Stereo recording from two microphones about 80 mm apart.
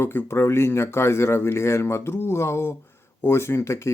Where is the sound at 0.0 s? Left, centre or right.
Left.